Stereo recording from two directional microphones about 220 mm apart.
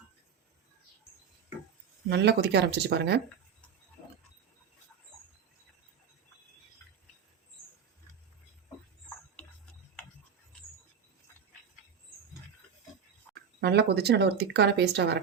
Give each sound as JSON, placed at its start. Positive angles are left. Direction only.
{"t": 2.0, "sound": "speech", "side_deg": -50}
{"t": 13.6, "sound": "speech", "side_deg": -45}